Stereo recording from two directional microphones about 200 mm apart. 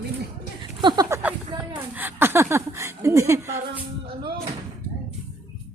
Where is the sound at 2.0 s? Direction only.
10° right (ahead or behind).